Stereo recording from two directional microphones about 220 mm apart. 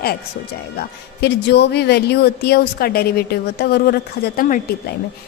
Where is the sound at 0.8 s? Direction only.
50° left (ahead or behind).